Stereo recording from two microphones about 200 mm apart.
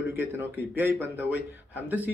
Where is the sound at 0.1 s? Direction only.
10° right (ahead or behind).